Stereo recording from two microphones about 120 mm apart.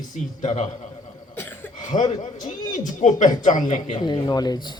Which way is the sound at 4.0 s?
40° left (ahead or behind).